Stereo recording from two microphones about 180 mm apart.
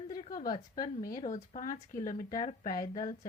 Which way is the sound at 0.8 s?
50° left (ahead or behind).